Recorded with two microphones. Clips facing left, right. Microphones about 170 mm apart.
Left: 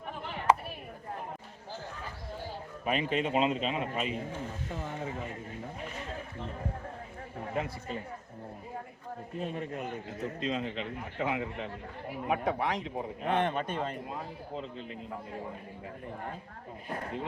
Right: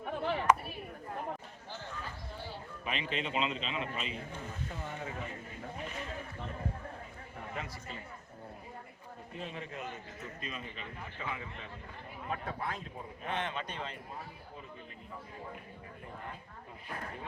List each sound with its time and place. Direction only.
2.8 s a man's voice: 45° left (ahead or behind)
7.5 s a man's voice: 50° left (ahead or behind)
9.4 s a man's voice: 45° left (ahead or behind)
10.4 s speech: 80° left; by 14.0 s 50° left (ahead or behind)
14.1 s speech: 80° left